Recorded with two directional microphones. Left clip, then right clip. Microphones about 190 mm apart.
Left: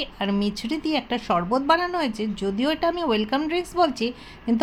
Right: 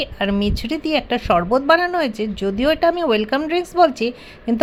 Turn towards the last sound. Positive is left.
turn(degrees=-15)  # may be behind; listen again after turning